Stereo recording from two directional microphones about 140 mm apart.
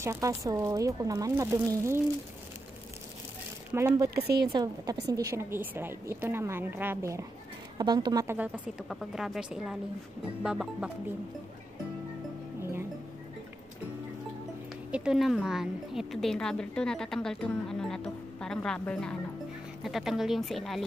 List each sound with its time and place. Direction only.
0.0 s speech: 20° right (ahead or behind)
3.7 s speech: 20° right (ahead or behind)
4.2 s a woman's voice: 35° right (ahead or behind)
7.7 s speech: 30° right (ahead or behind)
8.4 s a woman's voice: 5° right (ahead or behind)
14.9 s a woman's voice: 5° right (ahead or behind)